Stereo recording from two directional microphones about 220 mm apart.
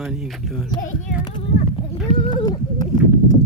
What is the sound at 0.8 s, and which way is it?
Speech, 35° left (ahead or behind).